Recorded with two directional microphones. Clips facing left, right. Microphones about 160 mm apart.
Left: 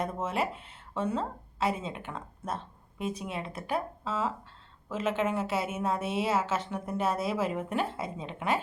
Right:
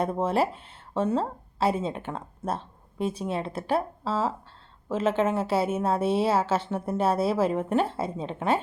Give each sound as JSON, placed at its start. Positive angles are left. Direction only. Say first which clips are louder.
{"t": 0.0, "sound": "a woman's voice", "louder": "right 6 dB", "side_deg": -30}